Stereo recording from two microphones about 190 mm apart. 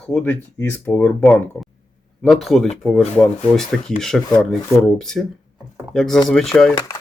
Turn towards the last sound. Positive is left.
turn(degrees=20)  # may be behind; listen again after turning